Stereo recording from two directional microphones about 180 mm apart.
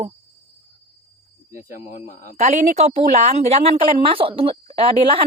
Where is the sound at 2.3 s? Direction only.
40° right (ahead or behind).